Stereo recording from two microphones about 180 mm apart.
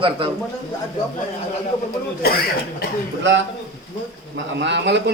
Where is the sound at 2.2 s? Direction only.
60° left (ahead or behind).